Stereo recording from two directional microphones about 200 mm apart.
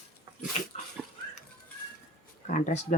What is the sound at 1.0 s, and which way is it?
Dog, 5° right (ahead or behind).